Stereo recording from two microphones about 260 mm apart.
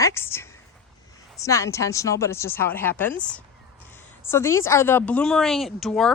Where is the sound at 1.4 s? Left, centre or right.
Centre.